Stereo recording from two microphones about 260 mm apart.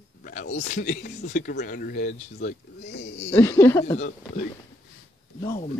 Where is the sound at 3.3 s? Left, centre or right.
Centre.